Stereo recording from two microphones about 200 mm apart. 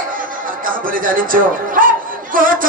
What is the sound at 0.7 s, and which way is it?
Speech, 45° right (ahead or behind).